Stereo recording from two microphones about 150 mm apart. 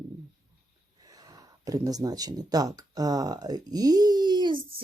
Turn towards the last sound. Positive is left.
turn(degrees=-30)  # may be behind; listen again after turning